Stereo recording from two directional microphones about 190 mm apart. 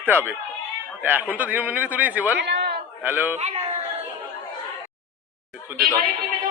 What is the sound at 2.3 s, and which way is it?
Chatter, 65° right (ahead or behind).